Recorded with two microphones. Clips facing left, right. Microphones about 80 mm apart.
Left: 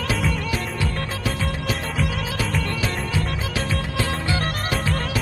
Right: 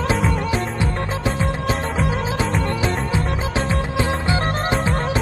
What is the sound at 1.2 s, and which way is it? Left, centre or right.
Music, right.